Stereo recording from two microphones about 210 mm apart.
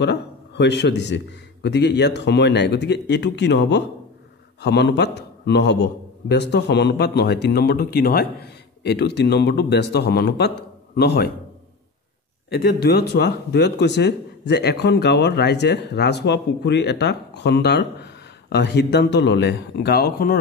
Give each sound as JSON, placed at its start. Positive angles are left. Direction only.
{"t": 0.0, "sound": "a man's voice", "side_deg": 55}
{"t": 12.5, "sound": "speech", "side_deg": 50}